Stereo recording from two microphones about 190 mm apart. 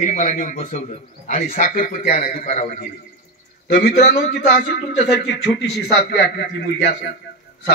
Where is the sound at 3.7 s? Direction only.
60° left (ahead or behind).